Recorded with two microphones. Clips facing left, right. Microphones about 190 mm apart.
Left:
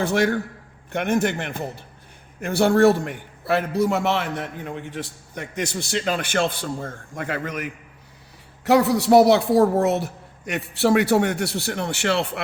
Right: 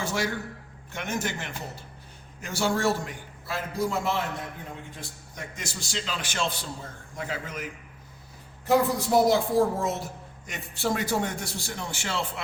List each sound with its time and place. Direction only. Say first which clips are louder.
0.0 s a man's voice: left 9 dB; 60° left (ahead or behind)
8.6 s a woman's voice: left 6 dB; 75° left (ahead or behind)